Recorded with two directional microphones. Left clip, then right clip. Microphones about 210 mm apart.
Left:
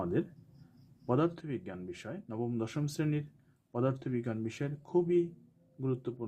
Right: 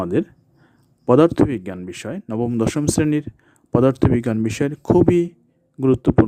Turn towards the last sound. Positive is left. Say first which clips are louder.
# right 19 dB
turn(degrees=-50)  # may be behind; listen again after turning